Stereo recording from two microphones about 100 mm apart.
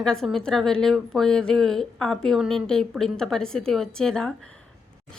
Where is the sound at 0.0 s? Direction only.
5° left (ahead or behind).